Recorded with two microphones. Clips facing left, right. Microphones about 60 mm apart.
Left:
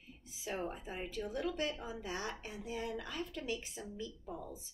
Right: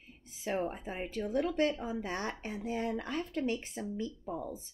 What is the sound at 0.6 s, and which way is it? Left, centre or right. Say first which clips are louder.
A woman's voice: right 4 dB; right.